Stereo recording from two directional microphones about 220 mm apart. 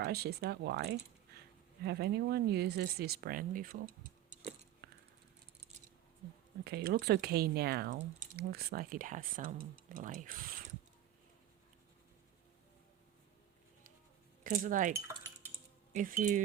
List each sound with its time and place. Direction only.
0.0 s speech: 45° right (ahead or behind)
4.8 s a sound: 50° right (ahead or behind)
6.7 s speech: 45° right (ahead or behind)
14.4 s speech: 35° right (ahead or behind)